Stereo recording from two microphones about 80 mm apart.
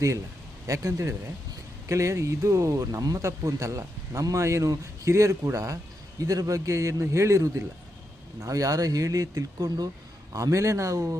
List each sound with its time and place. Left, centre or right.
0.7 s a man's voice: right
10.3 s a man's voice: right